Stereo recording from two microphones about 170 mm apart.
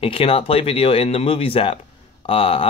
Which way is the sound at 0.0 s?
30° left (ahead or behind).